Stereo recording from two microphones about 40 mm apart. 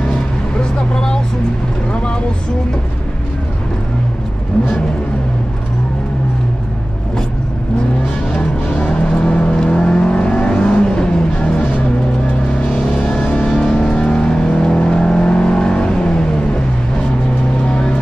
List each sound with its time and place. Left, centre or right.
0.6 s vehicle: centre
8.7 s vehicle: centre
11.3 s music: left
12.6 s vehicle: left
17.6 s vehicle: left